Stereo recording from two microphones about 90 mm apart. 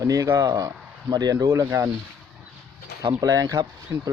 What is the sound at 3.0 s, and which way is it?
Speech, 45° right (ahead or behind).